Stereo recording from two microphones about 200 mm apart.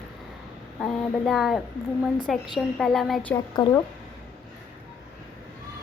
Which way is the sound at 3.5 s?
20° left (ahead or behind).